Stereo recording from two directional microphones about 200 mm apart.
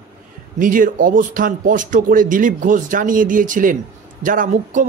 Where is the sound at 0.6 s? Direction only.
40° right (ahead or behind).